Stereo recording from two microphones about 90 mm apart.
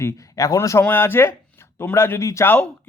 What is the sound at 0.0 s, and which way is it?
Speech, 35° left (ahead or behind).